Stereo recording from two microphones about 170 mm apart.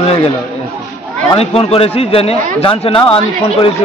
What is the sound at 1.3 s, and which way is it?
Speech, 35° left (ahead or behind).